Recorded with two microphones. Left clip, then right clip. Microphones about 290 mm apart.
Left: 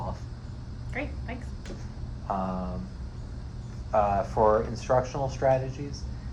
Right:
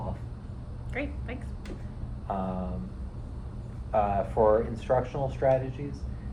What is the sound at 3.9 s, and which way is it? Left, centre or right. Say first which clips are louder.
Speech: left 2 dB; left.